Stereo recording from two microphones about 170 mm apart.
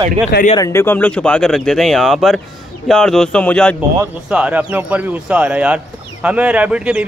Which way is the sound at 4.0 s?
5° right (ahead or behind).